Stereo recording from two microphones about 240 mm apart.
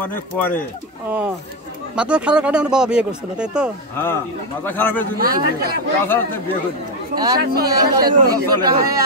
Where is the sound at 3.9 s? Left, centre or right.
Centre.